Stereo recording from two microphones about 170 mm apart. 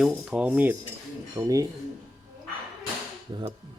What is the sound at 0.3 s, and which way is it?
Dishes, 10° right (ahead or behind).